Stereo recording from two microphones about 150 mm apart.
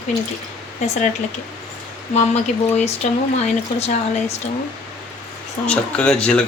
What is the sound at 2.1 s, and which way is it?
Speech, 45° left (ahead or behind).